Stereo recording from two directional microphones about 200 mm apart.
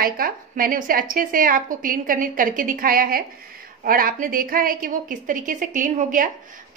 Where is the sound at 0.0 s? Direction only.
45° right (ahead or behind).